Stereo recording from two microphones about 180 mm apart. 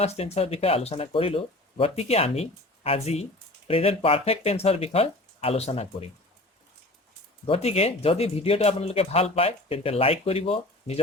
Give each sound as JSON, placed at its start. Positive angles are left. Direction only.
{"t": 0.0, "sound": "speech", "side_deg": 35}
{"t": 7.4, "sound": "speech", "side_deg": 30}